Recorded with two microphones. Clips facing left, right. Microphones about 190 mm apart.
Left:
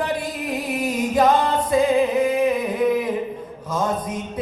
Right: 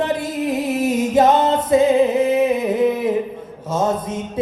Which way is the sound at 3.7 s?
25° right (ahead or behind).